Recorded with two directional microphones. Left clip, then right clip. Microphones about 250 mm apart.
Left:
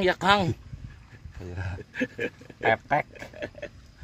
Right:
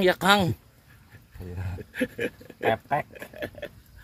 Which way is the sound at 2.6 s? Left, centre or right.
Left.